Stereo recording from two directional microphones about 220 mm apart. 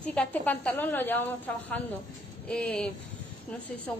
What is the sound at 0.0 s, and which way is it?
A woman's voice, 5° left (ahead or behind).